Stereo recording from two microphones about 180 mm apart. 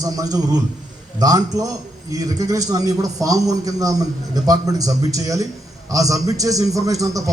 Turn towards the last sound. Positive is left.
turn(degrees=-20)  # may be behind; listen again after turning